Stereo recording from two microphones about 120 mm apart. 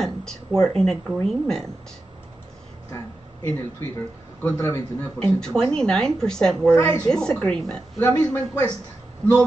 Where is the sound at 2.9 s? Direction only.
25° left (ahead or behind).